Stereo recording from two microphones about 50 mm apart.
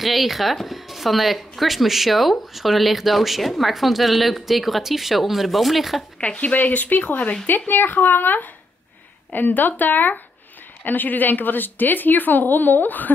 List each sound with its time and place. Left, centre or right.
0.0 s speech: centre
6.2 s a woman's voice: left